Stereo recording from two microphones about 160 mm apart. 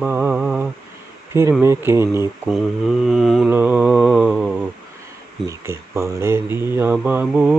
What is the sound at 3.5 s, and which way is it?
Speech, 10° right (ahead or behind).